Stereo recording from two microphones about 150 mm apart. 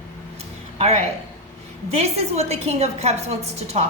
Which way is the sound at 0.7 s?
45° right (ahead or behind).